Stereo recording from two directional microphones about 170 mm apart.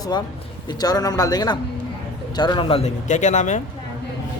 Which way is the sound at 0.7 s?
25° left (ahead or behind).